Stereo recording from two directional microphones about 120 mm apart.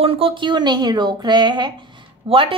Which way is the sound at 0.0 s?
50° right (ahead or behind).